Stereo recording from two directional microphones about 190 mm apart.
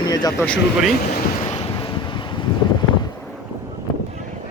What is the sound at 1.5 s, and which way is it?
Wind, 25° left (ahead or behind).